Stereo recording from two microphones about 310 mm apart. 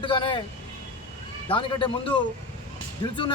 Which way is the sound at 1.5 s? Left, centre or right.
Centre.